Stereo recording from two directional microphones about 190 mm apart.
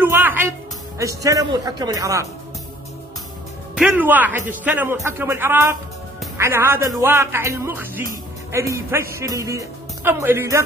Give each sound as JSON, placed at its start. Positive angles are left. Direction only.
{"t": 0.0, "sound": "music", "side_deg": -10}
{"t": 0.9, "sound": "a man's voice", "side_deg": -15}
{"t": 3.7, "sound": "a man's voice", "side_deg": -5}